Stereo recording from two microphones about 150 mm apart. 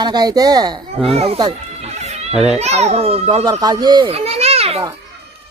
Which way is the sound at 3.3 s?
25° right (ahead or behind).